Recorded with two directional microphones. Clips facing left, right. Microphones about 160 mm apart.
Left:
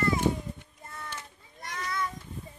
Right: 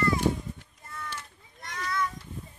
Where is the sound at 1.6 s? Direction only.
25° left (ahead or behind).